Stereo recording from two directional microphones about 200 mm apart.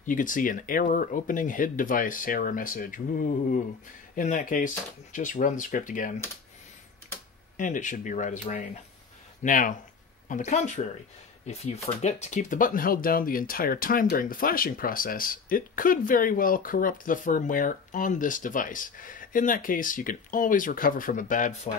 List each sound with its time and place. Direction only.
0.0 s speech: 40° left (ahead or behind)
7.5 s speech: 40° left (ahead or behind)